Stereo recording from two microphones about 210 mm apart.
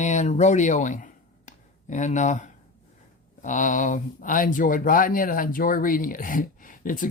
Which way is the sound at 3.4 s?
35° left (ahead or behind).